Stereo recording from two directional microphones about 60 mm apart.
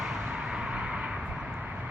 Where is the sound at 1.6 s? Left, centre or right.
Right.